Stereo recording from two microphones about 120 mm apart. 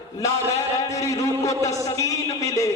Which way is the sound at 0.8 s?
25° left (ahead or behind).